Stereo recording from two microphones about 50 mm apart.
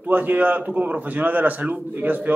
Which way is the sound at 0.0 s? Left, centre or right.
Right.